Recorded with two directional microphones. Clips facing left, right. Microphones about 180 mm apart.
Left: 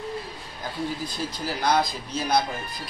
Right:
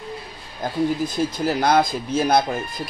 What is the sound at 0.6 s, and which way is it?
Speech, 45° right (ahead or behind).